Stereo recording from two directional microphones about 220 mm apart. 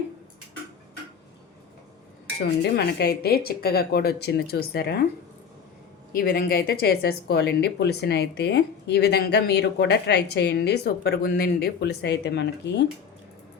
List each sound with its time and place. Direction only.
2.6 s speech: 50° left (ahead or behind)
6.1 s speech: 40° left (ahead or behind)